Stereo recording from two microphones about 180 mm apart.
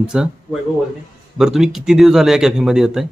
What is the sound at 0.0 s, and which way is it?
Speech, 5° right (ahead or behind).